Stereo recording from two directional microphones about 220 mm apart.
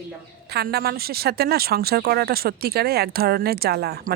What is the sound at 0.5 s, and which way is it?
Speech, 45° right (ahead or behind).